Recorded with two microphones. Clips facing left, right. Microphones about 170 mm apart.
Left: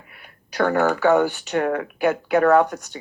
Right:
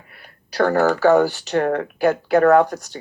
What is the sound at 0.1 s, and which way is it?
Speech, 35° right (ahead or behind).